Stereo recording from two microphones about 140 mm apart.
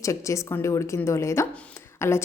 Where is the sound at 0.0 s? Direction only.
20° left (ahead or behind).